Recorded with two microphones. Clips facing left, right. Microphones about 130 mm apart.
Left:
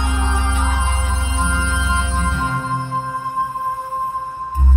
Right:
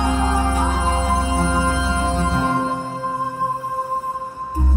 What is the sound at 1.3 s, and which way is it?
Music, 40° right (ahead or behind).